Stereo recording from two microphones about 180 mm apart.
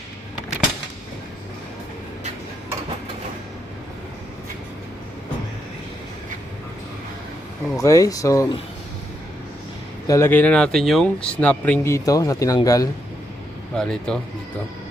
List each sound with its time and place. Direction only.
7.8 s speech: 20° left (ahead or behind)
10.1 s speech: 15° left (ahead or behind)
13.7 s speech: 5° left (ahead or behind)